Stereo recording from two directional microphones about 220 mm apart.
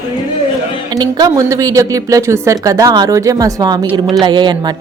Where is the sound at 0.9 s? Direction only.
15° right (ahead or behind).